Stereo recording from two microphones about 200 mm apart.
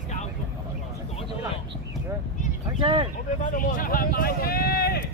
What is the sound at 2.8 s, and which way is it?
Speech, 25° right (ahead or behind).